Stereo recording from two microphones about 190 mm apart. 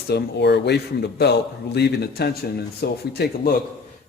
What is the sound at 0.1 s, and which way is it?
A man's voice, 60° left (ahead or behind).